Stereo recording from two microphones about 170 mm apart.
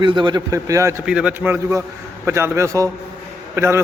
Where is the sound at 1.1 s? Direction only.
5° right (ahead or behind).